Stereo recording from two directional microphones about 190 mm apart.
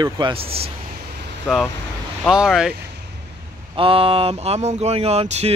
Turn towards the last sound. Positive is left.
turn(degrees=-35)  # may be behind; listen again after turning